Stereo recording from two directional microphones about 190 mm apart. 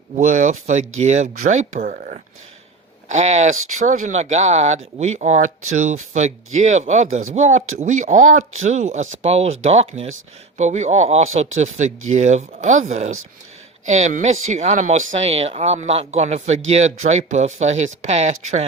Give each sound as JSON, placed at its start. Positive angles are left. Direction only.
{"t": 0.2, "sound": "speech", "side_deg": -40}